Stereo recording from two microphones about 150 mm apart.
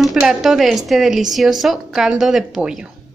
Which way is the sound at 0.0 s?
Centre (ahead or behind).